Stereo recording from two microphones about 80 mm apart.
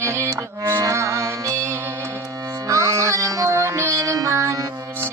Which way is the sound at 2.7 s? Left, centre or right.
Right.